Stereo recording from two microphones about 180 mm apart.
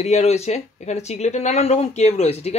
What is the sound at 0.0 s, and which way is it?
Speech, 40° left (ahead or behind).